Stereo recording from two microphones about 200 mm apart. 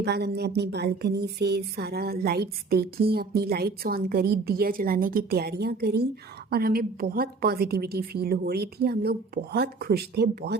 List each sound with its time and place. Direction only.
0.0 s speech: 55° right (ahead or behind)